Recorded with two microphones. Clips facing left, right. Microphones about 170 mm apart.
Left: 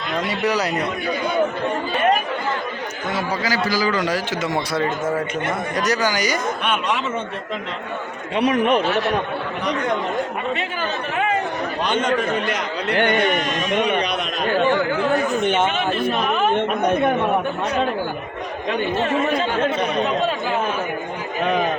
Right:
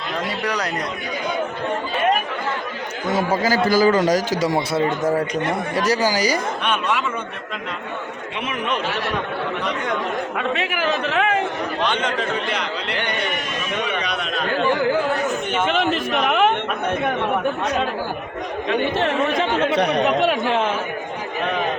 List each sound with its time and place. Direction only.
0.4 s a man's voice: 5° left (ahead or behind)
3.2 s a man's voice: 50° right (ahead or behind); by 6.4 s 30° right (ahead or behind)
8.4 s a man's voice: 45° left (ahead or behind)
10.5 s speech: 90° right
11.9 s a man's voice: 45° left (ahead or behind)
15.8 s speech: 90° right
18.9 s speech: 85° right